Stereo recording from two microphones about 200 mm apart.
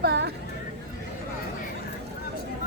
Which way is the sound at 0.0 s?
55° right (ahead or behind).